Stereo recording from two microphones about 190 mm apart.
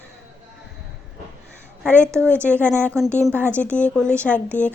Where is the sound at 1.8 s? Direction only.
5° left (ahead or behind).